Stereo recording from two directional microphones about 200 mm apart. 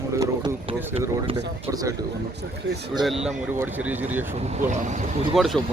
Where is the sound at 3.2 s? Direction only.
10° right (ahead or behind).